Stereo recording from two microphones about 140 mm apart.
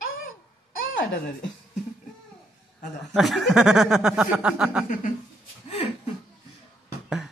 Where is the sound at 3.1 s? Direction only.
Centre (ahead or behind).